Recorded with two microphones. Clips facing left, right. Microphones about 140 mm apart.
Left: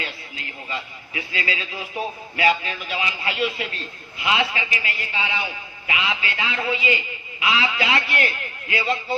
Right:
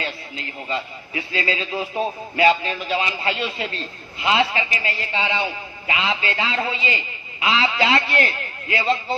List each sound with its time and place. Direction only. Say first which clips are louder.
0.0 s a man's voice: right 4 dB; 30° right (ahead or behind)